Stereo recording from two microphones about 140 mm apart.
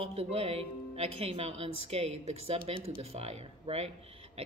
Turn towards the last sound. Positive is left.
turn(degrees=-45)  # may be behind; listen again after turning